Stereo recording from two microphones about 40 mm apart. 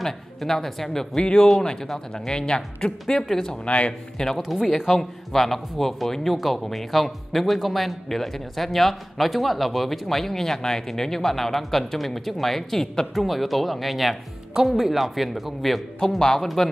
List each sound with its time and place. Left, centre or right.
0.0 s speech: centre
3.6 s a man's voice: left
4.4 s a man's voice: centre
16.2 s speech: centre